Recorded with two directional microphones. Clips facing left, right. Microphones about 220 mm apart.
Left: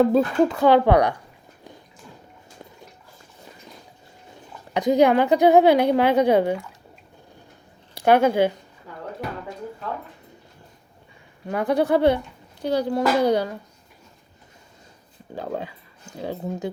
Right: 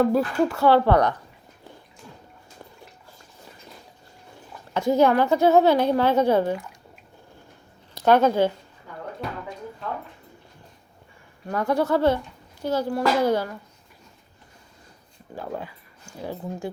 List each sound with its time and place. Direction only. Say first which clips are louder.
0.0 s a woman's voice: left 3 dB; 20° left (ahead or behind)
4.7 s a woman's voice: left 2 dB; 15° left (ahead or behind)
7.9 s speech: left 1 dB; 10° left (ahead or behind)
11.4 s a woman's voice: left 2 dB; 15° left (ahead or behind)
15.4 s speech: left 3 dB; 20° left (ahead or behind)